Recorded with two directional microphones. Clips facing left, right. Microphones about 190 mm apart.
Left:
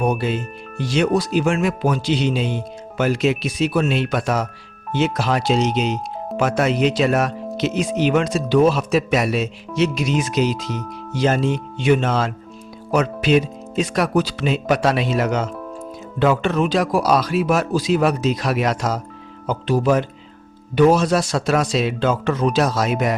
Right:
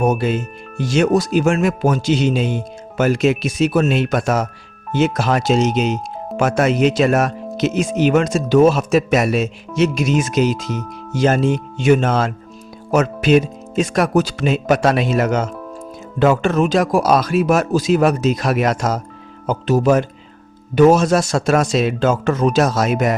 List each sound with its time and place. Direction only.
0.0 s speech: 45° right (ahead or behind)